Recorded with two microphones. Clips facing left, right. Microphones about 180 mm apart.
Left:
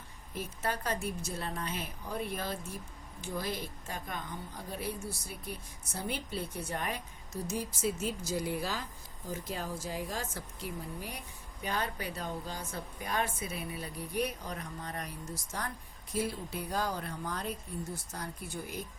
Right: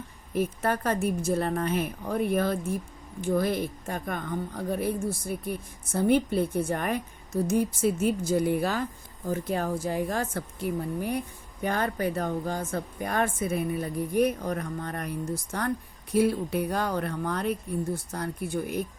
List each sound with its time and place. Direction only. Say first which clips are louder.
0.3 s a woman's voice: right 9 dB; 55° right (ahead or behind)